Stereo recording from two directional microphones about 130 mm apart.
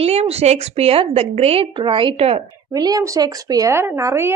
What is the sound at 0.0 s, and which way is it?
Speech, 55° right (ahead or behind).